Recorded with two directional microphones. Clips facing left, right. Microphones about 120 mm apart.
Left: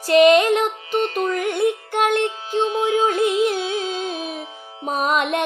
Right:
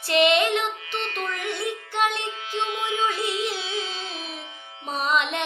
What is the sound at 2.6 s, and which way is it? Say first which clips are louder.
Music: left 7 dB; 35° left (ahead or behind).